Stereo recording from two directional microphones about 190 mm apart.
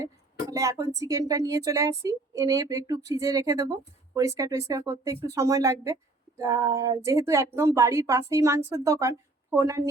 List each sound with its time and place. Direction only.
0.5 s speech: 15° right (ahead or behind)